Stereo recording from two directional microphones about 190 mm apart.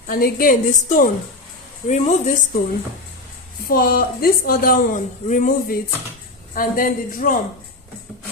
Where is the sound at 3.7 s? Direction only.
50° left (ahead or behind).